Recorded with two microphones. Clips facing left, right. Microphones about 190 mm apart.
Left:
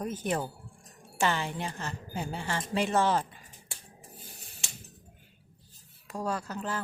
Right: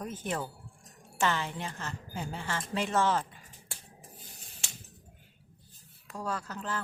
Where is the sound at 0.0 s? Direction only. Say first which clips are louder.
Left 4 dB; 20° left (ahead or behind).